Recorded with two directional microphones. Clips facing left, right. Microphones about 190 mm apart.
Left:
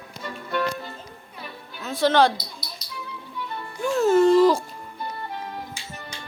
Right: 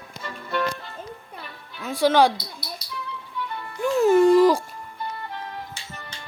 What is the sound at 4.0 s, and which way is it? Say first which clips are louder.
Music: right 1 dB; 15° right (ahead or behind).